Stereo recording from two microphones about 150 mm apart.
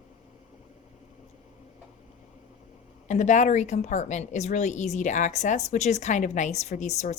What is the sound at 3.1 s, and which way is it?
A woman's voice, 55° left (ahead or behind).